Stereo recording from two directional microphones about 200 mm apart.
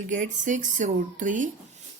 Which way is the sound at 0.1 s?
40° right (ahead or behind).